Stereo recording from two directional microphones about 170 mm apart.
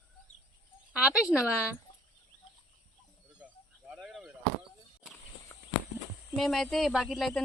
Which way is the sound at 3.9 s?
Centre (ahead or behind).